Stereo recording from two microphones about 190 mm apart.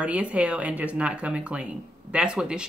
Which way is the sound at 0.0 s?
5° right (ahead or behind).